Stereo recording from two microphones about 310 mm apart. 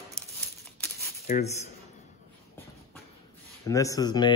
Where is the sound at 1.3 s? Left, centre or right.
Left.